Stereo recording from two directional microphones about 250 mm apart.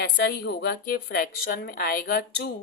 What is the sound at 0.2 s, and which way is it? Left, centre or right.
A woman's voice, left.